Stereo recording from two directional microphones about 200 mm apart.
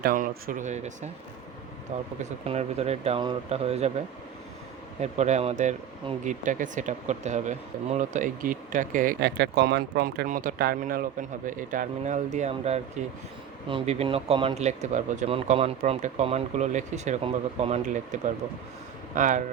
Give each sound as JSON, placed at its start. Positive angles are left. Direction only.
{"t": 0.0, "sound": "speech", "side_deg": -45}
{"t": 2.4, "sound": "speech", "side_deg": -30}
{"t": 4.9, "sound": "speech", "side_deg": -35}
{"t": 9.2, "sound": "speech", "side_deg": -55}
{"t": 10.2, "sound": "speech", "side_deg": -40}